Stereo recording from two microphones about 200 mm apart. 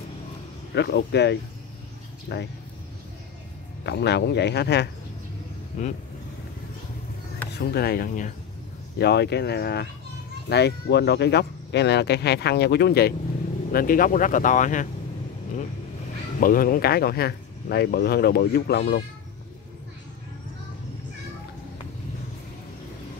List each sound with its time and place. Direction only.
0.7 s speech: 55° left (ahead or behind)
3.8 s speech: 55° left (ahead or behind)
7.5 s speech: 55° left (ahead or behind)
8.9 s speech: 55° left (ahead or behind); by 14.9 s 40° left (ahead or behind)
16.3 s speech: 45° left (ahead or behind)